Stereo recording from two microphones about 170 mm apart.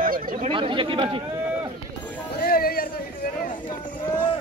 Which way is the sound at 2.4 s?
60° left (ahead or behind).